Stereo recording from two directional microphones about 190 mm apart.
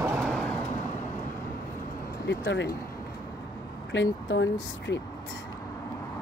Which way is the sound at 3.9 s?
75° left (ahead or behind).